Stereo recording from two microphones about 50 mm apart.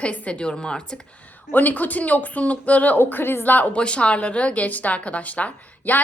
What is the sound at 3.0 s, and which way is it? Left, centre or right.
Speech, left.